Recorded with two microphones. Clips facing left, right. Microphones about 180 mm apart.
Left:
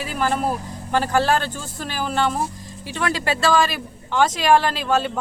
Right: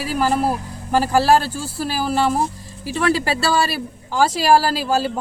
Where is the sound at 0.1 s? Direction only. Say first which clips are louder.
Right 4 dB; 5° right (ahead or behind).